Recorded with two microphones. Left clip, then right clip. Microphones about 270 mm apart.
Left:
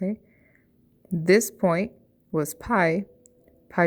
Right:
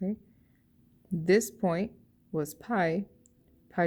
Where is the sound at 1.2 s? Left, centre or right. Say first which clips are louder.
Left 6 dB; centre.